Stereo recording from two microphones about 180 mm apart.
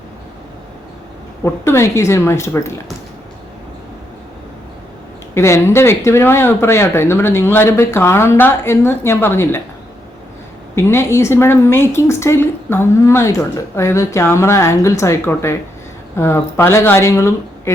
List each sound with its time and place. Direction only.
1.5 s speech: 15° left (ahead or behind)
5.3 s speech: 15° left (ahead or behind)
10.8 s speech: 15° left (ahead or behind)